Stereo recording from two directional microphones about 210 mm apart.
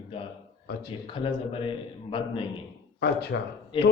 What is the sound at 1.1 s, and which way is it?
Speech, 25° left (ahead or behind).